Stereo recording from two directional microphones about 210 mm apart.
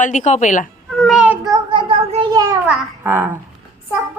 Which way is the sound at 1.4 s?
20° right (ahead or behind).